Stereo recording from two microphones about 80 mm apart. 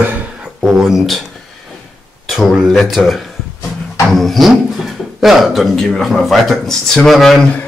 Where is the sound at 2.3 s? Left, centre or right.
Centre.